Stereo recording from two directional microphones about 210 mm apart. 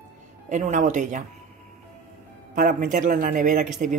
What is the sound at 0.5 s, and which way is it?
Speech, 35° right (ahead or behind).